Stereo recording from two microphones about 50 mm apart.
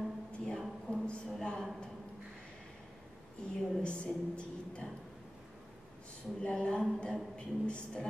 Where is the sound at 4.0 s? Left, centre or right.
Left.